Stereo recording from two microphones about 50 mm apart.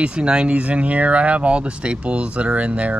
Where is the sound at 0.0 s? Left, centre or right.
Centre.